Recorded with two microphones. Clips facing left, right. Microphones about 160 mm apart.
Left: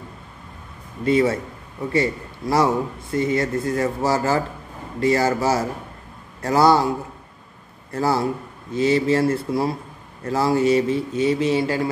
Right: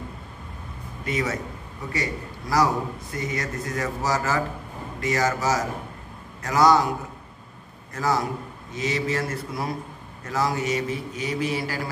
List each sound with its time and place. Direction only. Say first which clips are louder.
1.0 s a man's voice: left 9 dB; 30° left (ahead or behind)
2.5 s a man's voice: left 3 dB; 25° left (ahead or behind)
7.9 s a man's voice: left 4 dB; 30° left (ahead or behind)